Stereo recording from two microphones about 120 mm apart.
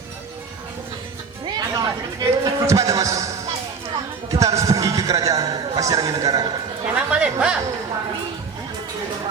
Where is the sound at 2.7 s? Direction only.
25° right (ahead or behind).